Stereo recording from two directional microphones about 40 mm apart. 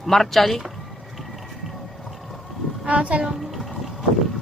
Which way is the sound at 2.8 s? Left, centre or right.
Right.